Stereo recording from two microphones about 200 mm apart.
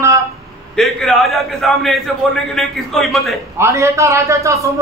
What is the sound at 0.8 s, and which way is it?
A man's voice, centre (ahead or behind).